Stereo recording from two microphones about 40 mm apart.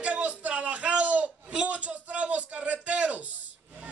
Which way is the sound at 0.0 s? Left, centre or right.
Right.